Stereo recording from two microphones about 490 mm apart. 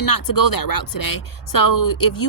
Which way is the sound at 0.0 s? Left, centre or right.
Left.